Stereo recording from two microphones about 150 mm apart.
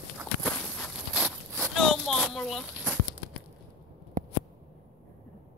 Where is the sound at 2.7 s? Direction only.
10° right (ahead or behind).